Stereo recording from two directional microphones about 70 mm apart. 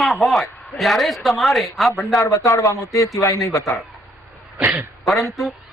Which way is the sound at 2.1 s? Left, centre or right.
Left.